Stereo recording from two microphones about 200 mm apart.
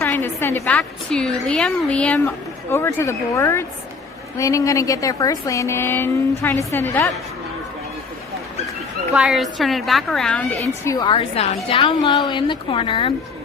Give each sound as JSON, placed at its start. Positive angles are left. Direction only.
{"t": 0.0, "sound": "a woman's voice", "side_deg": 10}
{"t": 9.1, "sound": "a woman's voice", "side_deg": 0}
{"t": 10.8, "sound": "a woman's voice", "side_deg": 20}